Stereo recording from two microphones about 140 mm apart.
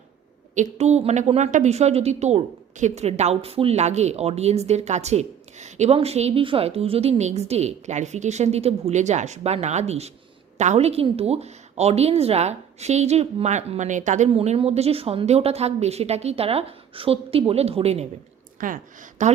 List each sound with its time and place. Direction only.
0.5 s a woman's voice: 55° right (ahead or behind)
18.6 s speech: 80° right
19.2 s a woman's voice: 60° right (ahead or behind)